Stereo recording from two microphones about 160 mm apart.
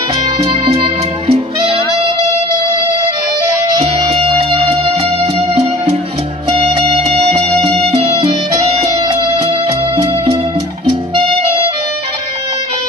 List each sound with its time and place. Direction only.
1.3 s music: 35° right (ahead or behind)
3.8 s music: 35° right (ahead or behind)
11.1 s clarinet: 35° right (ahead or behind)